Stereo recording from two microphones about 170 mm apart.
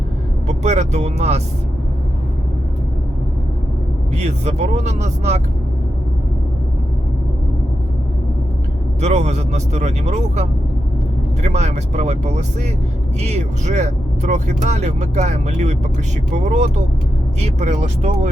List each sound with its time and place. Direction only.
0.4 s vehicle: 40° right (ahead or behind)
4.1 s speech: 40° right (ahead or behind)
9.0 s speech: 40° right (ahead or behind)
11.4 s speech: 40° right (ahead or behind)